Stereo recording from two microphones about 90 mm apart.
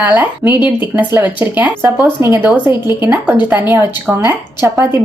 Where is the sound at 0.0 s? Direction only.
20° right (ahead or behind).